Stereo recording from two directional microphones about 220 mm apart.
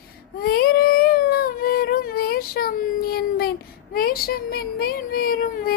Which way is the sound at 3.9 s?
40° left (ahead or behind).